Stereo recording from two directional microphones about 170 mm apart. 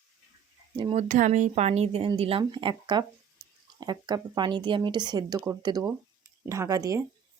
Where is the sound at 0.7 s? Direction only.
30° right (ahead or behind).